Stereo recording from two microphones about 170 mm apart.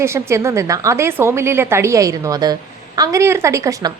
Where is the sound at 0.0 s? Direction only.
15° right (ahead or behind).